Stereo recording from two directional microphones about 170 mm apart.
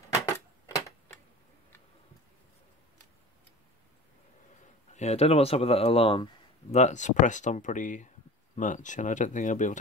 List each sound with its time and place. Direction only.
0.1 s typewriter: 20° left (ahead or behind)
4.9 s speech: 40° left (ahead or behind)
6.7 s speech: 45° left (ahead or behind)